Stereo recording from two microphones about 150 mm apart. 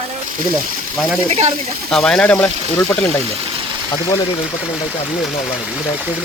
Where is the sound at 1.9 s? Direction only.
5° left (ahead or behind).